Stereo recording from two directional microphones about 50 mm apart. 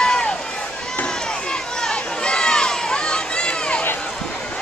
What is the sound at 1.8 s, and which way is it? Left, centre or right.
Run, centre.